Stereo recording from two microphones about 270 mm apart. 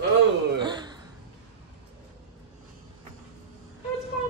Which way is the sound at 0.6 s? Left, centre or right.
Centre.